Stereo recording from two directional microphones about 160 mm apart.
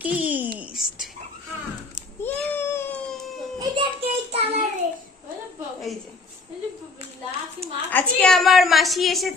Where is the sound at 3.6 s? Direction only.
30° right (ahead or behind).